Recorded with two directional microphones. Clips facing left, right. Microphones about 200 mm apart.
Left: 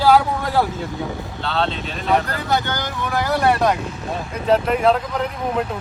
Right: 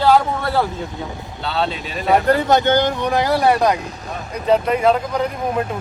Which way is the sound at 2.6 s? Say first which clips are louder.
Right 9 dB; 20° right (ahead or behind).